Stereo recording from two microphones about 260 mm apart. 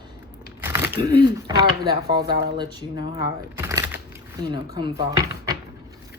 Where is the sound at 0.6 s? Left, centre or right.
Centre.